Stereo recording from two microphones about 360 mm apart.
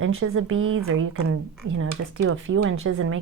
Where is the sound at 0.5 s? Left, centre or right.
Right.